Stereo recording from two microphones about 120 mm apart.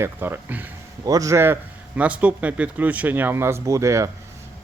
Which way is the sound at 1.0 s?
30° right (ahead or behind).